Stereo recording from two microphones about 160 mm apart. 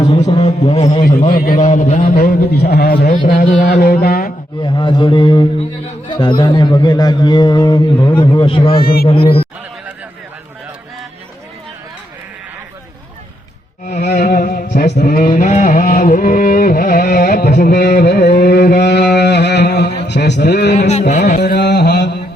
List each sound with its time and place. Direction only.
0.2 s a sound: 35° left (ahead or behind)
1.3 s a man's voice: 60° left (ahead or behind)
2.1 s a man's voice: 75° left (ahead or behind)
3.1 s a man's voice: 55° left (ahead or behind)
3.8 s speech: 70° left (ahead or behind)
4.6 s a man's voice: 30° left (ahead or behind)
8.8 s speech: 70° left (ahead or behind)
9.0 s a man's voice: 35° left (ahead or behind)
13.8 s music: 60° left (ahead or behind); by 19.9 s 90° left
20.1 s a sound: 90° left
21.1 s carnatic music: 50° left (ahead or behind)
21.4 s carnatic music: 90° left